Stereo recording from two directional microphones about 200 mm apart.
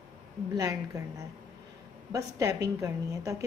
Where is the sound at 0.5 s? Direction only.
15° right (ahead or behind).